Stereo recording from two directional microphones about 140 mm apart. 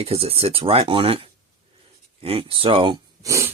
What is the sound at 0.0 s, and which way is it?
Speech, 45° right (ahead or behind).